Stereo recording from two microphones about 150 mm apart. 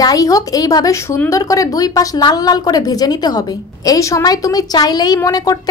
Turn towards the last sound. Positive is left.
turn(degrees=25)  # may be behind; listen again after turning